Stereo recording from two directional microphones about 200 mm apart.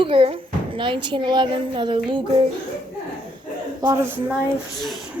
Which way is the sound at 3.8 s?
15° right (ahead or behind).